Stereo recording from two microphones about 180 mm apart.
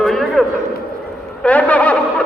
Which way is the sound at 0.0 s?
Centre (ahead or behind).